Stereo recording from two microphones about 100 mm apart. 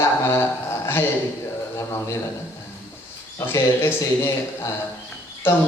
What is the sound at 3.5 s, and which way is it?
Speech, 25° left (ahead or behind).